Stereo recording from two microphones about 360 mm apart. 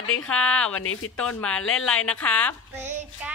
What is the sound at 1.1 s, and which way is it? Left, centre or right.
Child singing, centre.